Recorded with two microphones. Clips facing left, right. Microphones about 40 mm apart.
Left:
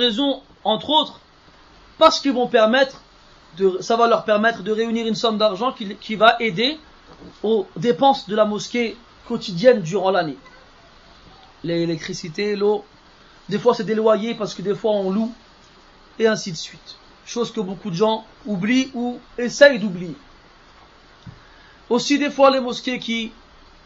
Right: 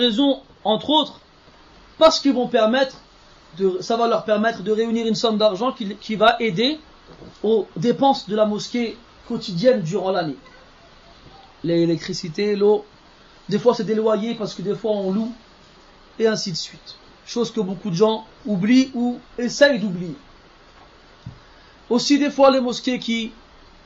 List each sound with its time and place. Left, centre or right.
0.7 s speech: left
2.2 s speech: left
11.6 s speech: left
12.5 s speech: left
13.5 s speech: left
17.7 s speech: left
18.0 s speech: left
21.8 s speech: left
22.6 s speech: left